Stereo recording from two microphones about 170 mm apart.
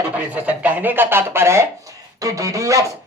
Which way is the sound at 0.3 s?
10° right (ahead or behind).